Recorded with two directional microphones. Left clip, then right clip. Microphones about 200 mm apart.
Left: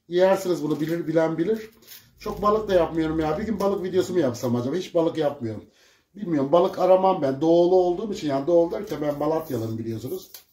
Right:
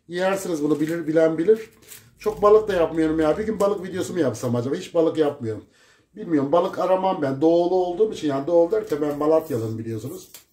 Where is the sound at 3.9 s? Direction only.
35° right (ahead or behind).